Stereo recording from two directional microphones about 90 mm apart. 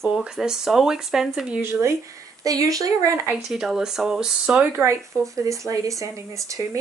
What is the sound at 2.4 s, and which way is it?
Speech, 40° right (ahead or behind).